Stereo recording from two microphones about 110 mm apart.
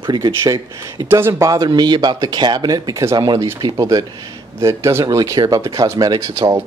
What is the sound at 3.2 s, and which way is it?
Speech, 40° right (ahead or behind).